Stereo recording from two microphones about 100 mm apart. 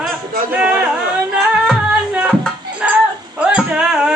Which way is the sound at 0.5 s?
10° right (ahead or behind).